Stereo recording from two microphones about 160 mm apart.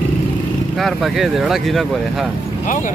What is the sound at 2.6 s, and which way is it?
Speech, 55° left (ahead or behind).